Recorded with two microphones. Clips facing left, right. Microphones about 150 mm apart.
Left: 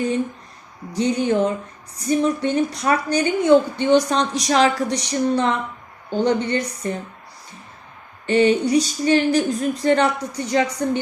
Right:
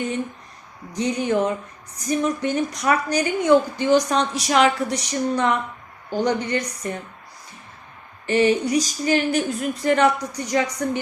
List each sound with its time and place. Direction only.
0.9 s a woman's voice: 30° left (ahead or behind)
8.3 s speech: 30° left (ahead or behind)